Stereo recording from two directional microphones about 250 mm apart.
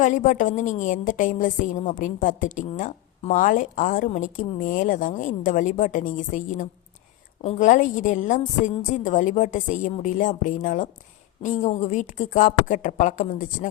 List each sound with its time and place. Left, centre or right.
0.0 s a woman's voice: left